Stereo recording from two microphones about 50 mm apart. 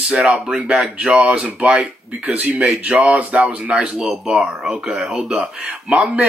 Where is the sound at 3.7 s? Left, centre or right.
Centre.